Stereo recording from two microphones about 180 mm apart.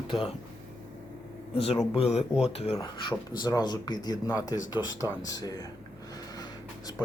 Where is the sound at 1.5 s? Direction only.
35° left (ahead or behind).